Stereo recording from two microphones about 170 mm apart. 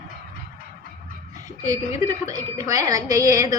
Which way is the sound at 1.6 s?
20° right (ahead or behind).